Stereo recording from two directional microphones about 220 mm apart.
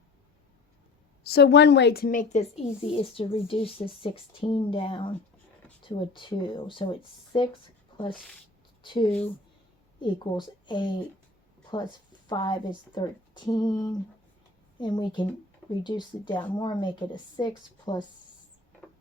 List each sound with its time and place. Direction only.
1.2 s a woman's voice: 50° left (ahead or behind); by 7.5 s 20° left (ahead or behind)
8.1 s speech: 5° left (ahead or behind)
8.8 s a woman's voice: 20° left (ahead or behind)